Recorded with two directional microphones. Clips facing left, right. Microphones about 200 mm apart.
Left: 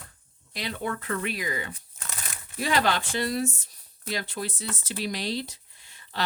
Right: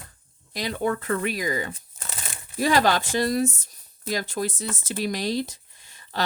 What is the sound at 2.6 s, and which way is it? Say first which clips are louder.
Speech: right 5 dB; 40° right (ahead or behind).